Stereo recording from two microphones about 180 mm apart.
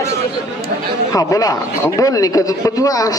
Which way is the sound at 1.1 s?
20° left (ahead or behind).